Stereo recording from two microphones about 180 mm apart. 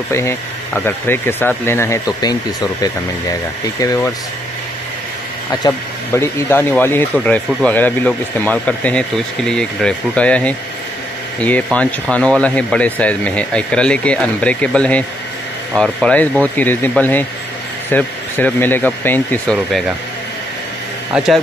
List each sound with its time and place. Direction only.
0.1 s speech: 15° left (ahead or behind)
5.5 s speech: 15° left (ahead or behind)
21.1 s speech: 5° right (ahead or behind)